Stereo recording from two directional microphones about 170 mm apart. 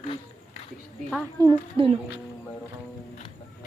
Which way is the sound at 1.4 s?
30° right (ahead or behind).